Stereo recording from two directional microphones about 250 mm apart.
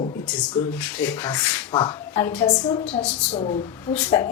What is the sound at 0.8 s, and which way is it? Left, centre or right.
Speech, centre.